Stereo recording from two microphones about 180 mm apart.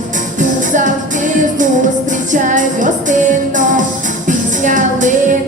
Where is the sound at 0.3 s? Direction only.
45° right (ahead or behind).